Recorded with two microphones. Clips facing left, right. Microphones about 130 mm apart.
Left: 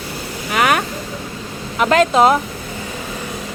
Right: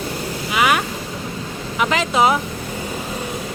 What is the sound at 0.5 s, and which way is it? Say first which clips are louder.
Vehicle: left 2 dB; 50° left (ahead or behind).